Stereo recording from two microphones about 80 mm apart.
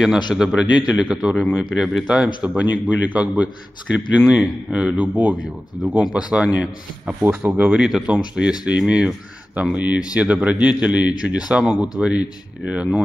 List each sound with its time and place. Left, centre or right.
0.3 s a man's voice: centre